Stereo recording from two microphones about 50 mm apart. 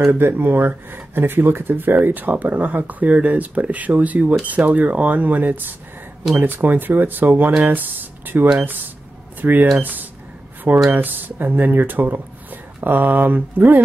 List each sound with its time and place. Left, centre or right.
0.0 s speech: right